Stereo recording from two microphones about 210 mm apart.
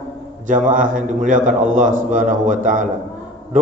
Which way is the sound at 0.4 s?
40° right (ahead or behind).